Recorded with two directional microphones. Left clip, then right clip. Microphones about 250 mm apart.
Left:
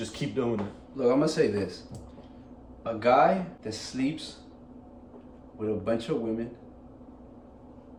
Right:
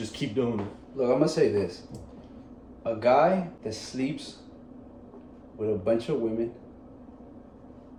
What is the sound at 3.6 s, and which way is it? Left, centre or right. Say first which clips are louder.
Speech: even; centre.